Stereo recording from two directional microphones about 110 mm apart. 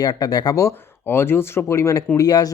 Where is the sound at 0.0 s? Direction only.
35° left (ahead or behind).